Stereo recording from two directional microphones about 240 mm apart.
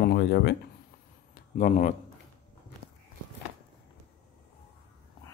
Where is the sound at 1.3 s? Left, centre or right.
Left.